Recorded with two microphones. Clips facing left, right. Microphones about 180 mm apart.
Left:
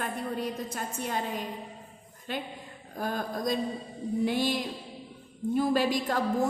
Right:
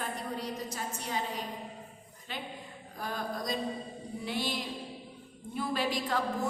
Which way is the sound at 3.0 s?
50° left (ahead or behind).